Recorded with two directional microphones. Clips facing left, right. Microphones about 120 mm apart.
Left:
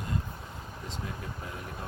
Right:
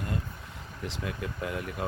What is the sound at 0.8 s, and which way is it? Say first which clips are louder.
Speech: right 5 dB; 90° right.